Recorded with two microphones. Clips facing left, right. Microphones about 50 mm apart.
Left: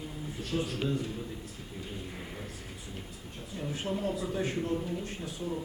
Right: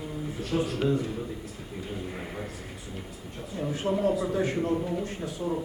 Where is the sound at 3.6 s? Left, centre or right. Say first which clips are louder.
Right 6 dB; right.